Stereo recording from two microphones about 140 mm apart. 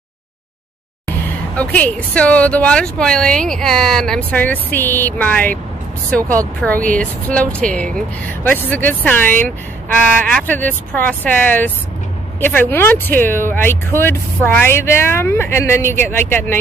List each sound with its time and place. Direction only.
1.0 s speech: 10° left (ahead or behind)